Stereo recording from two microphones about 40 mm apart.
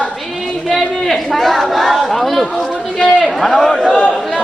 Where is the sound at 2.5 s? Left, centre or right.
Centre.